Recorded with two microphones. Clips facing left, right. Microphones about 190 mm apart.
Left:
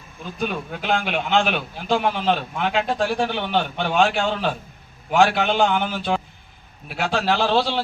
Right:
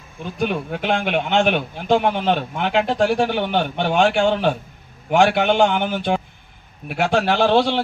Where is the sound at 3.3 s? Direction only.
50° right (ahead or behind).